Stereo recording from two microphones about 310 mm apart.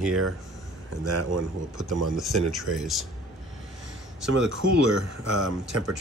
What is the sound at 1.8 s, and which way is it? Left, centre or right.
Speech, centre.